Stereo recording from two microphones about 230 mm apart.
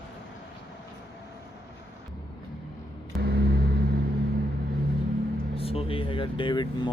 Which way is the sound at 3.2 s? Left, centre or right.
Right.